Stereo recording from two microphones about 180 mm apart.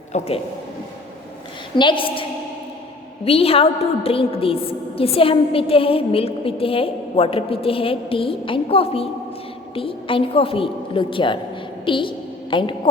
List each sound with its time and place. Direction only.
0.1 s a woman's voice: 40° left (ahead or behind)
1.7 s a woman's voice: 25° left (ahead or behind)
3.2 s a woman's voice: 35° left (ahead or behind)